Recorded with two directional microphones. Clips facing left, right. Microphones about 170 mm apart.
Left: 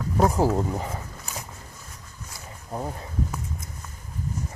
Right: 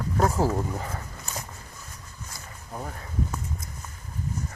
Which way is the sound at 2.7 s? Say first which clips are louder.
Left 5 dB; 25° left (ahead or behind).